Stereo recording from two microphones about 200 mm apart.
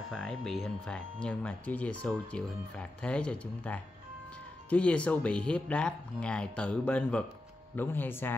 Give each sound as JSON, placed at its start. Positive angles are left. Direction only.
{"t": 0.1, "sound": "speech", "side_deg": 0}